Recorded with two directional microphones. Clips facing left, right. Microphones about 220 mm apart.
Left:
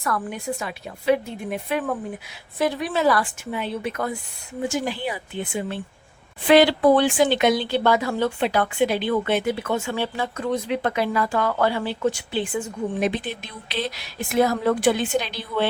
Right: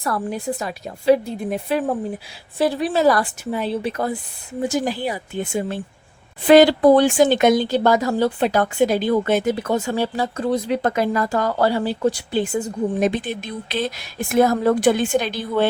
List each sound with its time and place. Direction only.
0.0 s a woman's voice: 35° right (ahead or behind)